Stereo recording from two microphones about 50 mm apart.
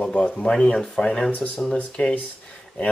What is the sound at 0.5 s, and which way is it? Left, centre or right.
Speech, centre.